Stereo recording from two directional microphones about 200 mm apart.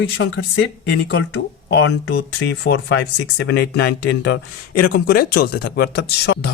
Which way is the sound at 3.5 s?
55° left (ahead or behind).